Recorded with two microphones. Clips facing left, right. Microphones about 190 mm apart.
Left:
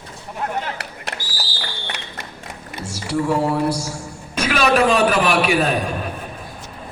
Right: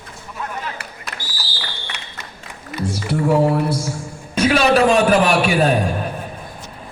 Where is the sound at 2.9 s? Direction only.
55° right (ahead or behind).